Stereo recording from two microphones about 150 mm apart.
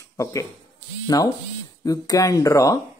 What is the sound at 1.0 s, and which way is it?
Speech, 25° left (ahead or behind).